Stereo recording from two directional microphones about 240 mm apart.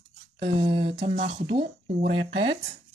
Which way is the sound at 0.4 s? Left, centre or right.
Right.